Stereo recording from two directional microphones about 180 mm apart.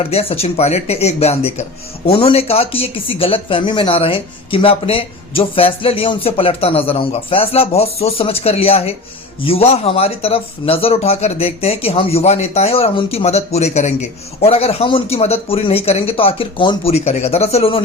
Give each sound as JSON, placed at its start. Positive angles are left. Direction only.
{"t": 0.1, "sound": "speech", "side_deg": 30}